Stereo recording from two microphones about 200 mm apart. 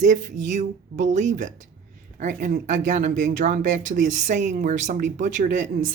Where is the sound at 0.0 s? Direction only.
40° right (ahead or behind).